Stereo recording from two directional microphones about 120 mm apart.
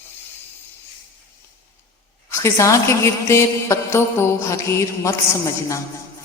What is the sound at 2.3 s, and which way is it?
A woman's voice, 25° left (ahead or behind).